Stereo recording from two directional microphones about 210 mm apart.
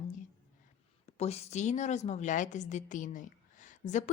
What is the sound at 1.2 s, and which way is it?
A woman's voice, 30° left (ahead or behind).